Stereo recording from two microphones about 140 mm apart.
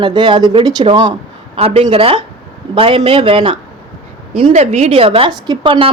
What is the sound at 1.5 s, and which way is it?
A woman's voice, 45° right (ahead or behind).